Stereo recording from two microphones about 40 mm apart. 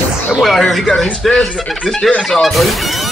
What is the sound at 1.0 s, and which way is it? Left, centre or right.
Speech, centre.